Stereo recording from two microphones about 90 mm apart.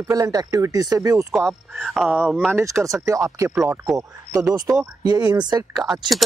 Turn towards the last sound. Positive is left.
turn(degrees=0)  # may be behind; listen again after turning